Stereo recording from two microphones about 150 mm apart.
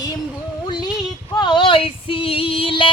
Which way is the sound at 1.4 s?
30° left (ahead or behind).